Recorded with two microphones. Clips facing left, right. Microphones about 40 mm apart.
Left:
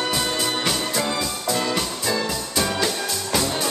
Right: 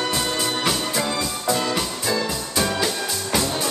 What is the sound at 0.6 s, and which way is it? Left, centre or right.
Music, centre.